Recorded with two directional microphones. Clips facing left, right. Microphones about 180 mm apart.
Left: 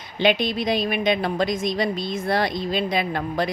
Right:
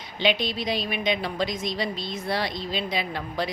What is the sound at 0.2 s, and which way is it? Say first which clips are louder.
A woman's voice: left 4 dB; 50° left (ahead or behind).